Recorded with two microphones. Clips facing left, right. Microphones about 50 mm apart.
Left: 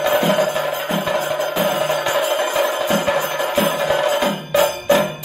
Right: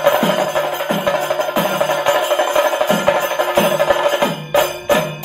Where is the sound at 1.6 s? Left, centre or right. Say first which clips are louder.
Right 1 dB; right.